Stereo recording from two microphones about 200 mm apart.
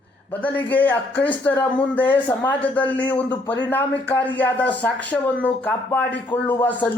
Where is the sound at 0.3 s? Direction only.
10° left (ahead or behind).